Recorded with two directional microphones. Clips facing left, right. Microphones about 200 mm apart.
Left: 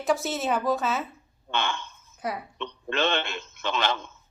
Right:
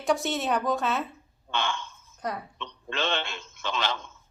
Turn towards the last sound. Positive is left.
turn(degrees=55)  # may be behind; listen again after turning